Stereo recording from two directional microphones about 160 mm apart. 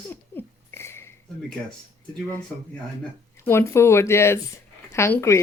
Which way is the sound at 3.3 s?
15° left (ahead or behind).